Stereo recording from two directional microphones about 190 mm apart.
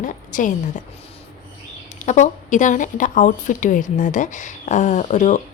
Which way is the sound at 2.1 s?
40° left (ahead or behind).